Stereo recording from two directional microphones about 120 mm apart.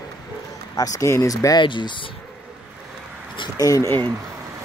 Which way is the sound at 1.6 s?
40° left (ahead or behind).